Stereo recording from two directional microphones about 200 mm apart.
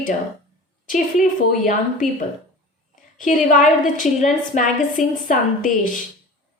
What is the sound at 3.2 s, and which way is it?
A woman's voice, 40° left (ahead or behind).